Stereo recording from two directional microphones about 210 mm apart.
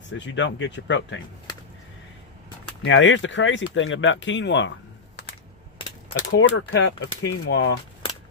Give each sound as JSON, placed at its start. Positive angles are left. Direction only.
{"t": 0.1, "sound": "speech", "side_deg": 60}
{"t": 2.8, "sound": "speech", "side_deg": 65}
{"t": 6.1, "sound": "speech", "side_deg": 60}